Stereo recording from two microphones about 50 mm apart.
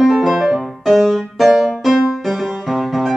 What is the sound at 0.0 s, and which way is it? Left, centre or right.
Music, centre.